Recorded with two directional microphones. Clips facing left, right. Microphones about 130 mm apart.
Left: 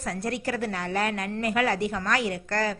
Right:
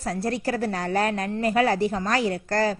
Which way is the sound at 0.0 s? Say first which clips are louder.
Right 3 dB; 35° right (ahead or behind).